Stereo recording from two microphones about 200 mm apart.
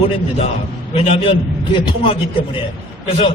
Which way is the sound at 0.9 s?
25° left (ahead or behind).